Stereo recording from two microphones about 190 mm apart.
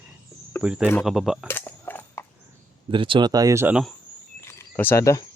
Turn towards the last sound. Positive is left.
turn(degrees=15)  # may be behind; listen again after turning